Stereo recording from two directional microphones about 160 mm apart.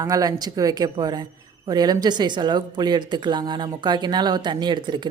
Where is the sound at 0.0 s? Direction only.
20° right (ahead or behind).